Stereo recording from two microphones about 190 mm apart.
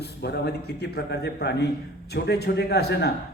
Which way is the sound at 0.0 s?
60° left (ahead or behind).